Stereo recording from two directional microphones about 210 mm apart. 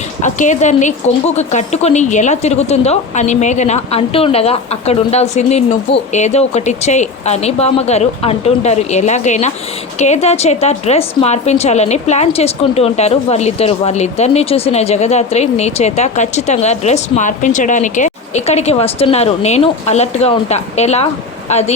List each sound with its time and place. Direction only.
0.2 s a woman's voice: 35° left (ahead or behind)